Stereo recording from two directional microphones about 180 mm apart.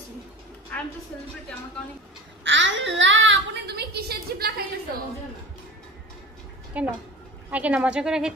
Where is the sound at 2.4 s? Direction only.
90° right; by 4.6 s 60° right (ahead or behind).